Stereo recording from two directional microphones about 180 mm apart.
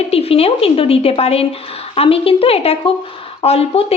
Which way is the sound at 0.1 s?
35° left (ahead or behind).